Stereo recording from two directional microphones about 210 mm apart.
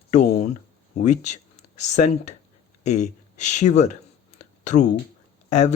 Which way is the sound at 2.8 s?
35° left (ahead or behind).